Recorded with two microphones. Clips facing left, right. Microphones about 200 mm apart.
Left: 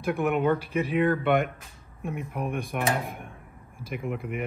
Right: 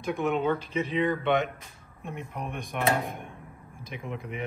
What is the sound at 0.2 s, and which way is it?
Speech, 15° left (ahead or behind).